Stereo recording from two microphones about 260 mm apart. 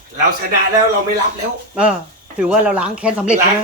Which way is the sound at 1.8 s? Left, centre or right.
Centre.